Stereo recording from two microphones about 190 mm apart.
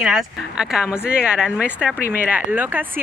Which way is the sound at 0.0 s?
5° right (ahead or behind).